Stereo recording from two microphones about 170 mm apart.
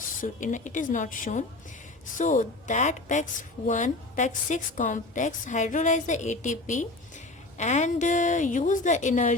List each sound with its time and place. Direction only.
0.2 s a woman's voice: 50° left (ahead or behind)